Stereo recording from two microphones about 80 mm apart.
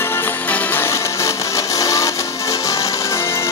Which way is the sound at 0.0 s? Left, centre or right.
Left.